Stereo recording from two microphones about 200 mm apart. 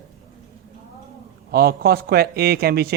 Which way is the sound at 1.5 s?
50° right (ahead or behind).